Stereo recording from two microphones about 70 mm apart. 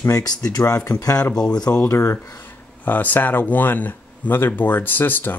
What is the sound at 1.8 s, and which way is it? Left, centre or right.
Speech, left.